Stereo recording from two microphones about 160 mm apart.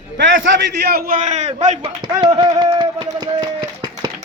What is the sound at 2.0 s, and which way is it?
Speech, 30° right (ahead or behind).